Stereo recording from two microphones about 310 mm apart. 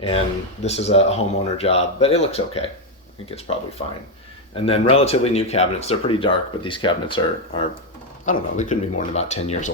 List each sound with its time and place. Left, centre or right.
0.6 s speech: left
4.5 s speech: centre